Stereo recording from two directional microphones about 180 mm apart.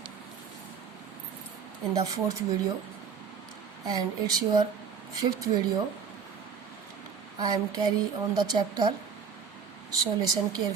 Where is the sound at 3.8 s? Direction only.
20° right (ahead or behind).